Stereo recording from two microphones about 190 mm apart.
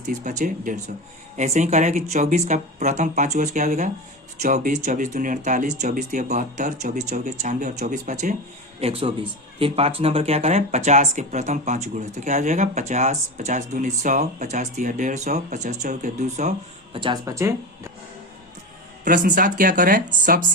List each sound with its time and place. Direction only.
0.0 s speech: 40° right (ahead or behind)
17.0 s speech: 20° right (ahead or behind)
19.0 s speech: 45° right (ahead or behind)